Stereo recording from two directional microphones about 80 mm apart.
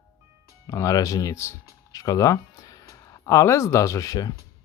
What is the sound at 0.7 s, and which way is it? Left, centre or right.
Speech, left.